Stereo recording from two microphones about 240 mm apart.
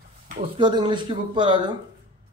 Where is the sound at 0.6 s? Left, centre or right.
Centre.